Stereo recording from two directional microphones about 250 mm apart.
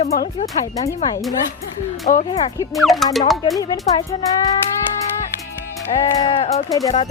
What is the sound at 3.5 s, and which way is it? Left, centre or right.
Speech, centre.